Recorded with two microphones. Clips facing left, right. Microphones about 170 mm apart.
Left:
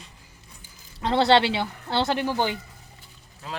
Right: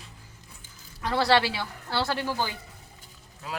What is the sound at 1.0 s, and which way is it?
Speech, 25° left (ahead or behind).